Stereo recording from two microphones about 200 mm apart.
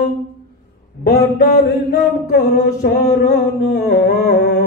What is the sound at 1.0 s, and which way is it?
Mantra, 45° left (ahead or behind).